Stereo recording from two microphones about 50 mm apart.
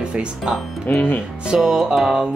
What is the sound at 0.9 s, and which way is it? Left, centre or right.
Speech, left.